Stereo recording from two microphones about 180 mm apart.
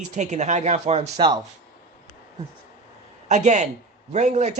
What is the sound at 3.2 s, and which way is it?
Speech, 40° right (ahead or behind).